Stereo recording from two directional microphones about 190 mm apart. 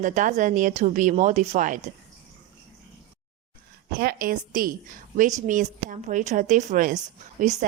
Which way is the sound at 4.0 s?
50° right (ahead or behind).